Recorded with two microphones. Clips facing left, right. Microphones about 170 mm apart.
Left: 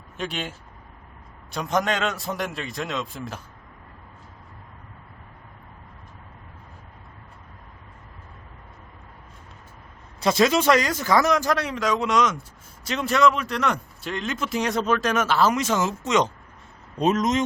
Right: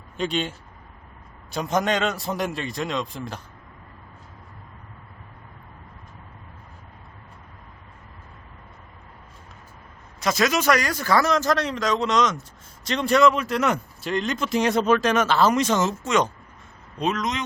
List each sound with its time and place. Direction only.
0.2 s a man's voice: 5° left (ahead or behind)
10.2 s speech: 30° left (ahead or behind); by 16.0 s 10° left (ahead or behind)
16.0 s speech: 20° left (ahead or behind)
17.0 s speech: 45° left (ahead or behind)